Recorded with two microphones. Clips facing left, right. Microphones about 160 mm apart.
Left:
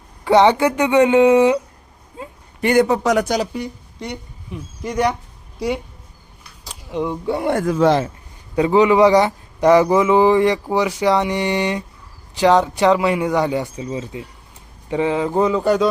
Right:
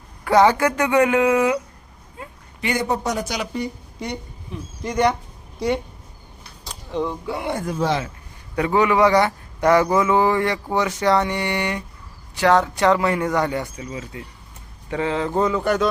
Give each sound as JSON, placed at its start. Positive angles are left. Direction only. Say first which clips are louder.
{"t": 0.3, "sound": "speech", "louder": "left 3 dB", "side_deg": 20}
{"t": 2.2, "sound": "a sound", "louder": "left 4 dB", "side_deg": 25}
{"t": 2.6, "sound": "a man's voice", "louder": "left 10 dB", "side_deg": 50}
{"t": 2.8, "sound": "a man's voice", "louder": "left 6 dB", "side_deg": 90}
{"t": 3.2, "sound": "speech", "louder": "left 7 dB", "side_deg": 40}
{"t": 3.5, "sound": "speech", "louder": "even", "side_deg": 0}
{"t": 6.7, "sound": "a sound", "louder": "left 2 dB", "side_deg": 15}
{"t": 7.5, "sound": "speech", "louder": "left 7 dB", "side_deg": 85}
{"t": 8.5, "sound": "a man's voice", "louder": "left 5 dB", "side_deg": 20}